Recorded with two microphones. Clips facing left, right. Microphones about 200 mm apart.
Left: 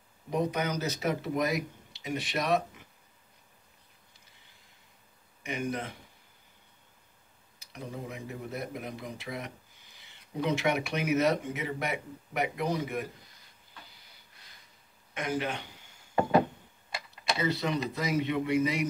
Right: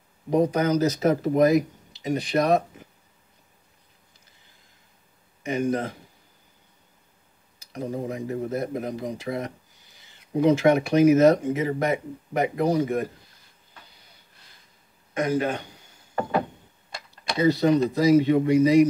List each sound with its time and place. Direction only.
0.3 s speech: 35° right (ahead or behind)
5.4 s speech: 35° right (ahead or behind)
7.7 s speech: 40° right (ahead or behind)
15.1 s a man's voice: 40° right (ahead or behind)
16.9 s typing: 5° left (ahead or behind)
17.4 s speech: 40° right (ahead or behind)